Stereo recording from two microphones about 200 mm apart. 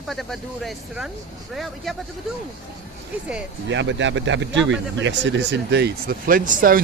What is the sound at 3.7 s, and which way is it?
Speech, 65° right (ahead or behind).